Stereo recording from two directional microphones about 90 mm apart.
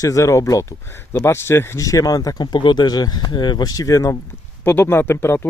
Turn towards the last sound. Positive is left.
turn(degrees=30)  # may be behind; listen again after turning